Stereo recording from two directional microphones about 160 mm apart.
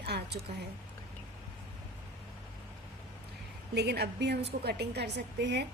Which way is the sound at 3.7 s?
90° right.